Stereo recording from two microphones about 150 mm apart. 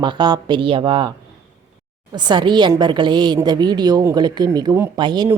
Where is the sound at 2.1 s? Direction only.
30° right (ahead or behind).